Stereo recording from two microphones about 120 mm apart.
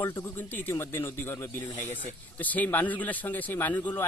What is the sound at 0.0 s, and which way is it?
A man's voice, 20° left (ahead or behind).